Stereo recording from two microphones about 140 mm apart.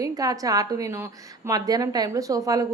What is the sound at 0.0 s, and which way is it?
A woman's voice, 25° right (ahead or behind).